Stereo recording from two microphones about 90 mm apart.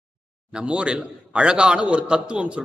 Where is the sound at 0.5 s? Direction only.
10° right (ahead or behind).